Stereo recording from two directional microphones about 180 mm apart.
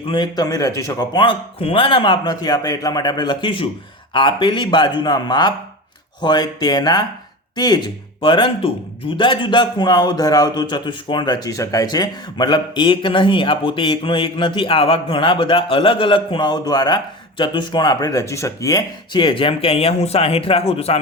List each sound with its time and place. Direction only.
0.1 s a man's voice: 25° left (ahead or behind)